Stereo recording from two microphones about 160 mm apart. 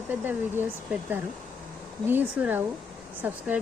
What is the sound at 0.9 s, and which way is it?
Speech, 10° right (ahead or behind).